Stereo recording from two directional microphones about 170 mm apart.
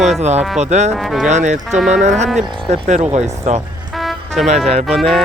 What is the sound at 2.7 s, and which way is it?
Speech, 40° right (ahead or behind).